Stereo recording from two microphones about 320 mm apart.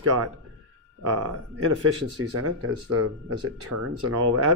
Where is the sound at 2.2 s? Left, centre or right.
Right.